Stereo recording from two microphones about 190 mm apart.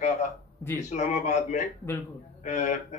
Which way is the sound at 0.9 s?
40° left (ahead or behind).